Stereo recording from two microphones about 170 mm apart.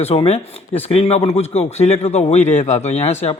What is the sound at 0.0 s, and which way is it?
Speech, 35° left (ahead or behind).